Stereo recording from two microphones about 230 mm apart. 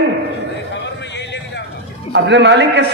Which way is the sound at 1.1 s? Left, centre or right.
Left.